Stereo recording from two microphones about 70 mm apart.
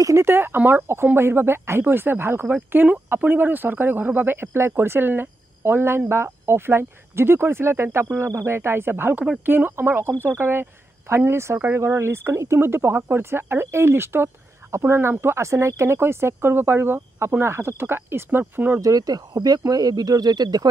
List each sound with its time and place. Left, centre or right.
0.0 s speech: right
18.8 s speech: right